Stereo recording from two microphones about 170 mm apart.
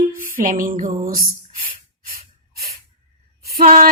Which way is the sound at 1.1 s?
55° right (ahead or behind).